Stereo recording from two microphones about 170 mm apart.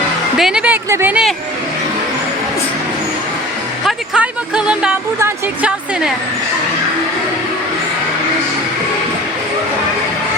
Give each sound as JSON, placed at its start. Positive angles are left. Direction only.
{"t": 0.3, "sound": "a woman's voice", "side_deg": -5}
{"t": 3.8, "sound": "speech", "side_deg": -5}